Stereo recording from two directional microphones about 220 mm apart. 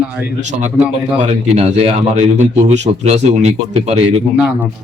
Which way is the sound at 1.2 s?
30° right (ahead or behind).